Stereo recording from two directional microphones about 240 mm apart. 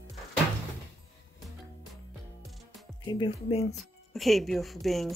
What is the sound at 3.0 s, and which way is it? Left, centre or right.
Speech, left.